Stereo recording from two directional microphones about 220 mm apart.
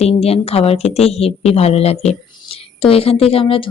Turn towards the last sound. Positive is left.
turn(degrees=25)  # may be behind; listen again after turning